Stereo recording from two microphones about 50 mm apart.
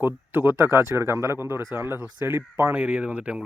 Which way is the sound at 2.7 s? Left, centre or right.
Right.